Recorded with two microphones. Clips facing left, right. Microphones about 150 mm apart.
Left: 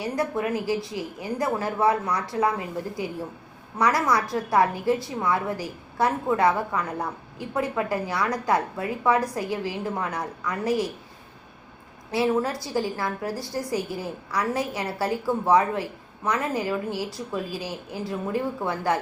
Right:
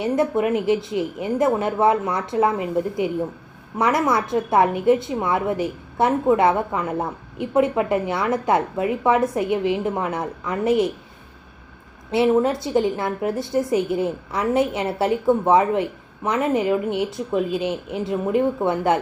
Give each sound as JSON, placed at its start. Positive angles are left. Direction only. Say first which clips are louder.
{"t": 0.0, "sound": "a woman's voice", "louder": "right 6 dB", "side_deg": -20}
{"t": 12.1, "sound": "a woman's voice", "louder": "right 6 dB", "side_deg": -20}